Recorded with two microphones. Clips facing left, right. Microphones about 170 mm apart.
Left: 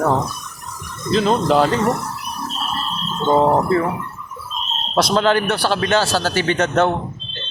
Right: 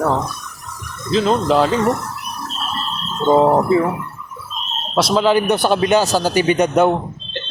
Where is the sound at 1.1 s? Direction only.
Centre (ahead or behind).